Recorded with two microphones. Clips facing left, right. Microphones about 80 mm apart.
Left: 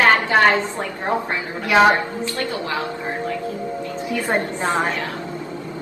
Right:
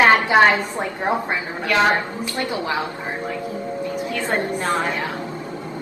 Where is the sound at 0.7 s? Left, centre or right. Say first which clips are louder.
Right 1 dB; centre.